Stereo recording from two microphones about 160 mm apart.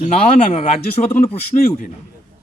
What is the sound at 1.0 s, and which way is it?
Speech, 40° left (ahead or behind).